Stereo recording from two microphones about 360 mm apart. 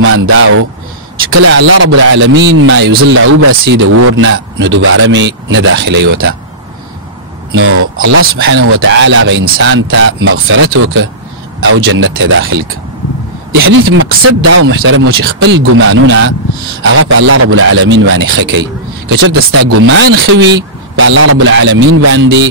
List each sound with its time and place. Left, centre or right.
0.1 s speech: right
3.9 s a man's voice: right
4.2 s speech: right
7.5 s speech: right
13.6 s a man's voice: right